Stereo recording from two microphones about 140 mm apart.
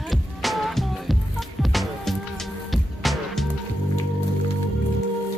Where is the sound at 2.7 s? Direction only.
Centre (ahead or behind).